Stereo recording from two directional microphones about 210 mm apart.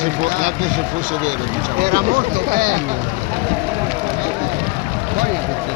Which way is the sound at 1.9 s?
40° right (ahead or behind).